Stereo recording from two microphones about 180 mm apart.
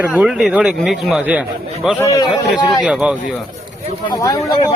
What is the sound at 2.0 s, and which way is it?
Speech, 15° left (ahead or behind).